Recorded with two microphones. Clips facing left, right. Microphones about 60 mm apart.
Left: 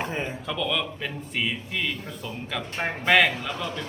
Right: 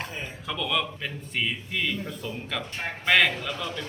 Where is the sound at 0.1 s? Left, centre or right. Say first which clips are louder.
Left 6 dB; left.